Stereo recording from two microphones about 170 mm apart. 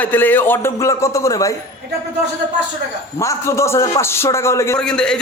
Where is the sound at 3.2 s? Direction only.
15° left (ahead or behind).